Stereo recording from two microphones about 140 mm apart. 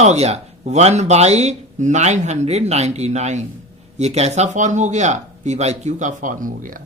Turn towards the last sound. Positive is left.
turn(degrees=-75)  # may be behind; listen again after turning